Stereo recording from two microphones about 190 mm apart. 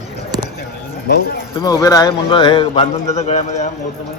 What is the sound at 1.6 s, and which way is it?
A man's voice, 20° left (ahead or behind).